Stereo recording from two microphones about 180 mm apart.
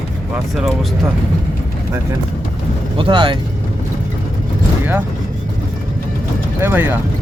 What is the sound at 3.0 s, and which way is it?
Speech, 25° right (ahead or behind).